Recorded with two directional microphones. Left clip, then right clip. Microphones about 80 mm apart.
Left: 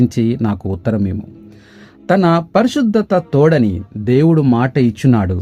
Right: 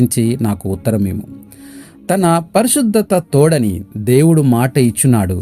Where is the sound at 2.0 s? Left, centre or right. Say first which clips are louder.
Left 1 dB; right.